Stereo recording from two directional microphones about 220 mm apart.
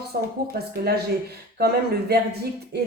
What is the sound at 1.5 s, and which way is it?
Speech, 45° right (ahead or behind).